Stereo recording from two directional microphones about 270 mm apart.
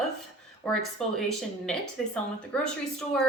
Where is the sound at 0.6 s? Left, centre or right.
Centre.